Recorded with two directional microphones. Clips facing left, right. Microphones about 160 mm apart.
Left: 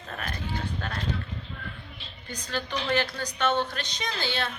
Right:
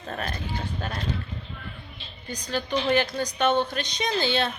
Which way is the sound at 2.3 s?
15° right (ahead or behind).